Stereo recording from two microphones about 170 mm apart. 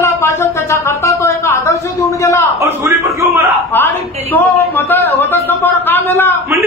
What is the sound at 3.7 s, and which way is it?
A man's voice, 10° left (ahead or behind).